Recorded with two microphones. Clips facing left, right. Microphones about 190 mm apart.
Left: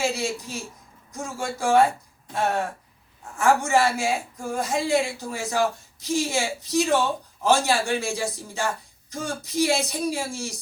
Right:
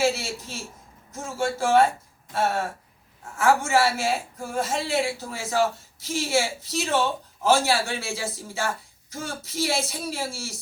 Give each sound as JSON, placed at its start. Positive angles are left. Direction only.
{"t": 0.0, "sound": "a man's voice", "side_deg": 15}